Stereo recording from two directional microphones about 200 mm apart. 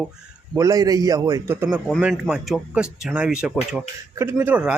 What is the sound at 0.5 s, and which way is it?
A man's voice, 15° right (ahead or behind).